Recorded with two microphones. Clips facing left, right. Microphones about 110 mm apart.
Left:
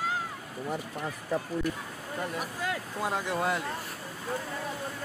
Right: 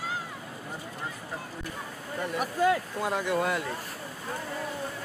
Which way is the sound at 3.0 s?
20° left (ahead or behind).